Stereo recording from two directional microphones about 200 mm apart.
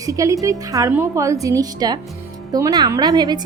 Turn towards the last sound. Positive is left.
turn(degrees=-20)  # may be behind; listen again after turning